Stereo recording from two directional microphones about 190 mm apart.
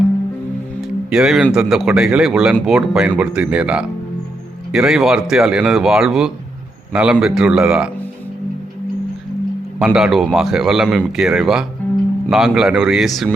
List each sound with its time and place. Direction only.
1.1 s a man's voice: 5° right (ahead or behind)
9.7 s a man's voice: 5° right (ahead or behind)